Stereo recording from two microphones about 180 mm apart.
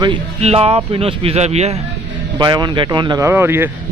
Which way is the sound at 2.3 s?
25° right (ahead or behind).